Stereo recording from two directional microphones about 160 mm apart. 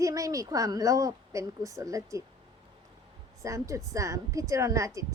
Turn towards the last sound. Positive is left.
turn(degrees=-20)  # may be behind; listen again after turning